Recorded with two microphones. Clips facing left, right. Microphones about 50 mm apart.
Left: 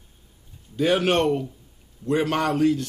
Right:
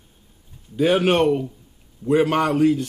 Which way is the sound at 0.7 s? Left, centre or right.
Centre.